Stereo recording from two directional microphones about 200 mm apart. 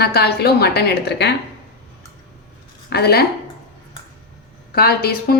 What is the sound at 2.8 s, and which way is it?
Speech, 55° left (ahead or behind).